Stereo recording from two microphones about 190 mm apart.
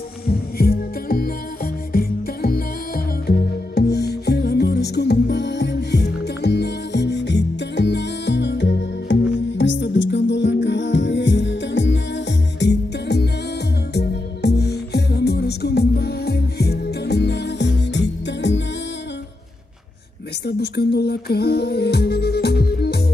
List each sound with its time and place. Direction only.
0.3 s music: 55° left (ahead or behind)
20.4 s music: 60° left (ahead or behind)